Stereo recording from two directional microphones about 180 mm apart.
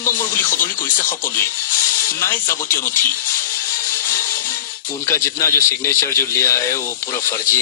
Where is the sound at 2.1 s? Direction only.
15° left (ahead or behind).